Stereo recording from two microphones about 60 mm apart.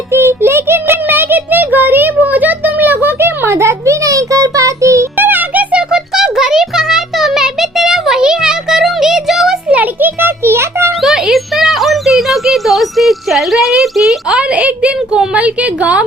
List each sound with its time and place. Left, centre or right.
0.1 s child singing: right
5.1 s music: right
5.9 s music: centre
9.6 s a child's voice: right
11.0 s a child's voice: centre
14.3 s a woman's voice: centre